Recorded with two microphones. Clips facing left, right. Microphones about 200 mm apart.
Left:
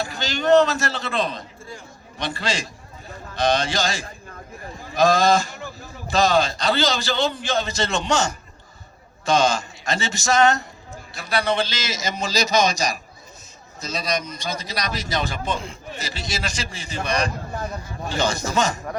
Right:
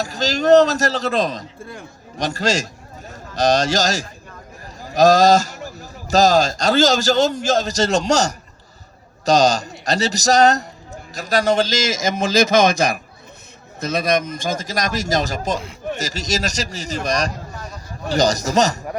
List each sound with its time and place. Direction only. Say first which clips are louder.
0.0 s a man's voice: right 5 dB; 40° right (ahead or behind)